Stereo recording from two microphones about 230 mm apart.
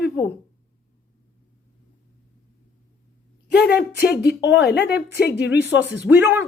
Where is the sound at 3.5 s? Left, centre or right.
Left.